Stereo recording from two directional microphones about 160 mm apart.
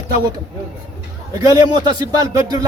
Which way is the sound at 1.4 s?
25° right (ahead or behind).